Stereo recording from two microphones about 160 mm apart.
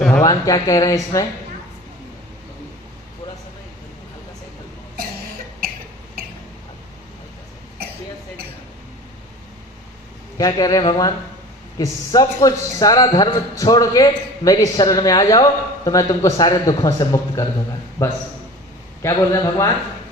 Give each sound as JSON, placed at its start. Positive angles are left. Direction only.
{"t": 0.2, "sound": "a man's voice", "side_deg": 20}
{"t": 10.3, "sound": "a man's voice", "side_deg": 20}
{"t": 19.0, "sound": "a man's voice", "side_deg": 20}